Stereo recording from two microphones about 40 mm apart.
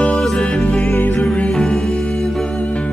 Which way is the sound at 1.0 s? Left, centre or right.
Left.